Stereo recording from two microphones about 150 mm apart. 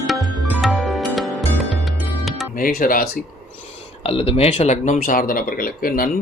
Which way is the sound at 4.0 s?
40° left (ahead or behind).